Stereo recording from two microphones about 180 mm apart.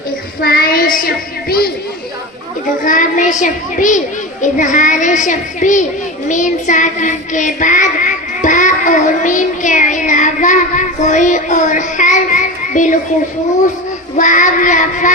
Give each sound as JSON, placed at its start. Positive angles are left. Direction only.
{"t": 0.4, "sound": "speech", "side_deg": 55}
{"t": 2.8, "sound": "a child's voice", "side_deg": 45}
{"t": 6.2, "sound": "child singing", "side_deg": 45}
{"t": 14.2, "sound": "a child's voice", "side_deg": 45}